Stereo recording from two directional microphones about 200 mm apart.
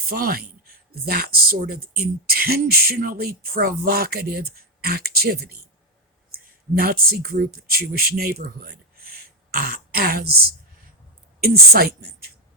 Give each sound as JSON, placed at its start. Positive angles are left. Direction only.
{"t": 0.1, "sound": "speech", "side_deg": -50}
{"t": 11.3, "sound": "speech", "side_deg": -50}